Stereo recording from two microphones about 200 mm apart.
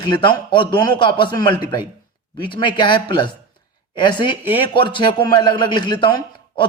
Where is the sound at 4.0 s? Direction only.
25° left (ahead or behind).